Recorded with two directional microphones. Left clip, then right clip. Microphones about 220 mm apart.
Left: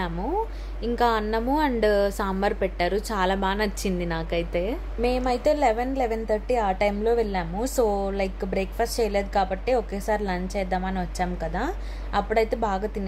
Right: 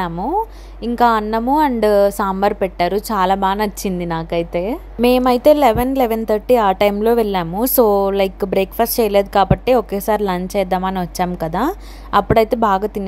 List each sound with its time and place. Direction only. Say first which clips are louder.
0.8 s a woman's voice: right 8 dB; 25° right (ahead or behind)